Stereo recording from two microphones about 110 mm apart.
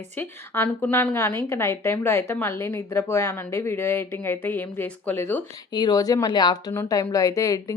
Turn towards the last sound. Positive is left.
turn(degrees=30)  # may be behind; listen again after turning